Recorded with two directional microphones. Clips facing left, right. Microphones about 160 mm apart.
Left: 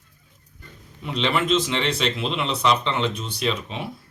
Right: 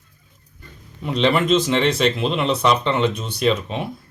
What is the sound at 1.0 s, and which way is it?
Speech, 45° right (ahead or behind).